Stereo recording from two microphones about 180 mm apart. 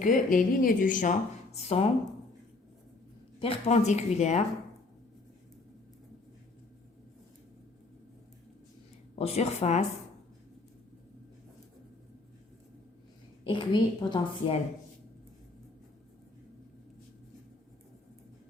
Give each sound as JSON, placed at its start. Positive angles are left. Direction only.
{"t": 0.0, "sound": "a woman's voice", "side_deg": 45}
{"t": 1.5, "sound": "speech", "side_deg": 35}
{"t": 3.4, "sound": "speech", "side_deg": 35}
{"t": 9.1, "sound": "speech", "side_deg": 35}
{"t": 13.4, "sound": "a woman's voice", "side_deg": 25}